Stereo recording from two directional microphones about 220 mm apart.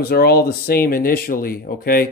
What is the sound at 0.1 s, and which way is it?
Speech, 45° left (ahead or behind).